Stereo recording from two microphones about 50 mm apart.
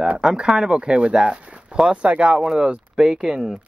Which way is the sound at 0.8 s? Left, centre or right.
Right.